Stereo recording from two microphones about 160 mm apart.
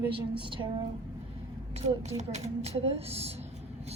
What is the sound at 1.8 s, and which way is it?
A woman's voice, 45° right (ahead or behind).